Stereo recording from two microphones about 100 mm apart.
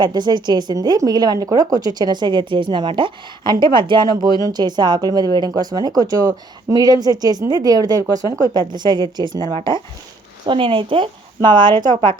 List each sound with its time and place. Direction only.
0.0 s speech: 45° right (ahead or behind)